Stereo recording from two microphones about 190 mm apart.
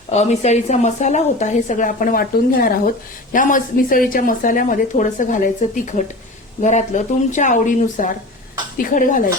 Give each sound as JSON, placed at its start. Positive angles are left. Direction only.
{"t": 0.1, "sound": "a woman's voice", "side_deg": 35}